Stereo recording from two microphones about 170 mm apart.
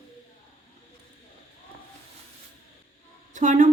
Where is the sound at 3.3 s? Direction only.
45° right (ahead or behind).